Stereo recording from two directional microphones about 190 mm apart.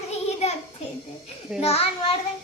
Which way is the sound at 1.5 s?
30° left (ahead or behind).